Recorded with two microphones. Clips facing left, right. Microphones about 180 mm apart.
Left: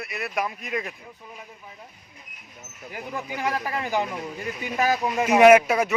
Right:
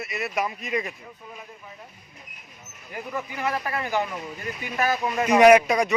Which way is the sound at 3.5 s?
15° left (ahead or behind).